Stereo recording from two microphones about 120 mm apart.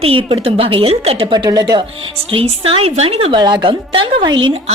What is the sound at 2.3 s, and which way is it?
A woman's voice, 50° right (ahead or behind).